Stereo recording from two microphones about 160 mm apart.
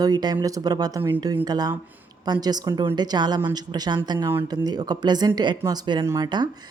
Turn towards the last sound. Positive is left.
turn(degrees=-25)  # may be behind; listen again after turning